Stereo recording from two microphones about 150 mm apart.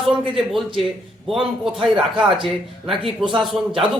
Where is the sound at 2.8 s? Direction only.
35° right (ahead or behind).